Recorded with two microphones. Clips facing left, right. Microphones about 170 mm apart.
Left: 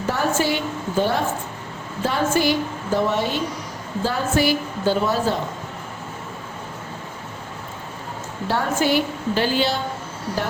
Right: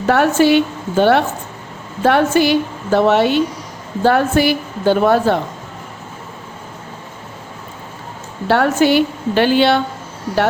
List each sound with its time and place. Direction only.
0.1 s a woman's voice: 70° right (ahead or behind)
8.4 s a woman's voice: 70° right (ahead or behind)